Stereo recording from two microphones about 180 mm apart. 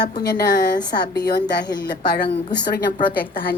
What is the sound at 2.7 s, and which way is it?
Speech, 50° left (ahead or behind).